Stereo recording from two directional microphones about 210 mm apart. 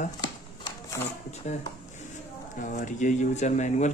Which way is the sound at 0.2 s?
20° left (ahead or behind).